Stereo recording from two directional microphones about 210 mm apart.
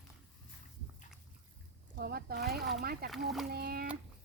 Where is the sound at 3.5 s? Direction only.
45° right (ahead or behind).